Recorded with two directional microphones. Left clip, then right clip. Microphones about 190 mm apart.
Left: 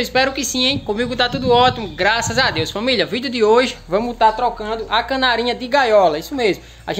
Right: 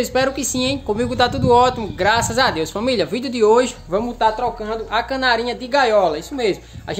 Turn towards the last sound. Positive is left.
turn(degrees=25)  # may be behind; listen again after turning